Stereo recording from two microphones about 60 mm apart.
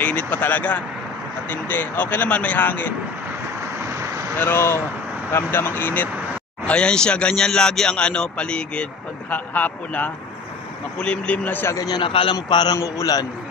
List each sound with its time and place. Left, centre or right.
0.0 s speech: left
3.9 s vehicle: right
4.4 s speech: left
6.6 s speech: centre
9.3 s speech: left
11.7 s a man's voice: left